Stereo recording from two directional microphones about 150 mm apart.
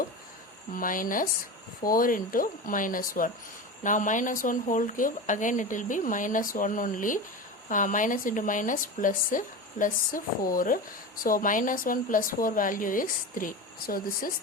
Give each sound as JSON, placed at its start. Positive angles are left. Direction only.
{"t": 0.7, "sound": "a woman's voice", "side_deg": 65}
{"t": 3.8, "sound": "a woman's voice", "side_deg": 60}